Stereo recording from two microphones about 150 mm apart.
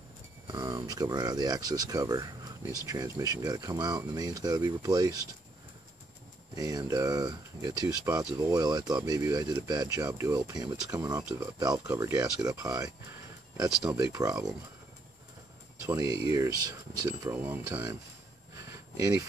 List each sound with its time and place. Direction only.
0.5 s speech: 30° right (ahead or behind)
6.5 s speech: 25° right (ahead or behind)
15.9 s speech: 25° right (ahead or behind)
18.7 s a sound: 20° right (ahead or behind)